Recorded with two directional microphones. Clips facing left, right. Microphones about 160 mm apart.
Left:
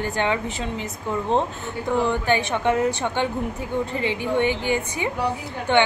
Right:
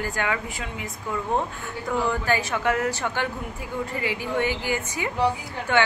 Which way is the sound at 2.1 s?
20° left (ahead or behind).